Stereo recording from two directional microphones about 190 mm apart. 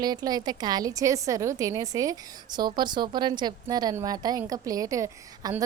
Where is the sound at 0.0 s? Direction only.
20° right (ahead or behind).